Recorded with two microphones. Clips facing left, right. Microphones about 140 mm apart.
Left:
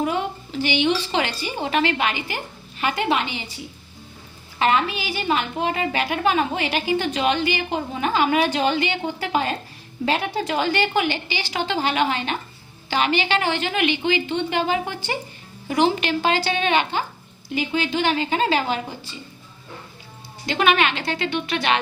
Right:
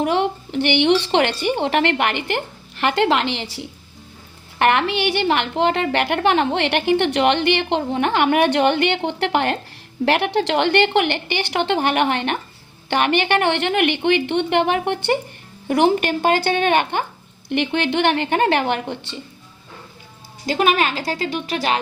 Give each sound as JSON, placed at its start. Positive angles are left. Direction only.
{"t": 0.0, "sound": "a woman's voice", "side_deg": -70}
{"t": 4.6, "sound": "a woman's voice", "side_deg": -70}
{"t": 17.5, "sound": "a woman's voice", "side_deg": -65}
{"t": 20.5, "sound": "speech", "side_deg": -40}